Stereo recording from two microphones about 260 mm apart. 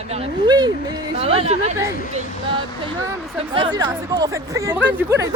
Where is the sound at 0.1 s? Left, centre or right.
Centre.